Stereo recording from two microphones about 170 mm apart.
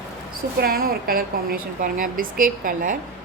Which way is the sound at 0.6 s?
60° right (ahead or behind).